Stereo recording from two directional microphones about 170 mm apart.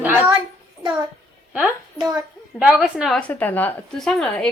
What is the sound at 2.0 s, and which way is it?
Speech, 20° right (ahead or behind).